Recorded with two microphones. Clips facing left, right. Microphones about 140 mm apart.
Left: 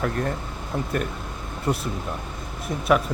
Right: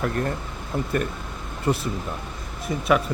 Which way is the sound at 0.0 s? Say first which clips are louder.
Even; centre (ahead or behind).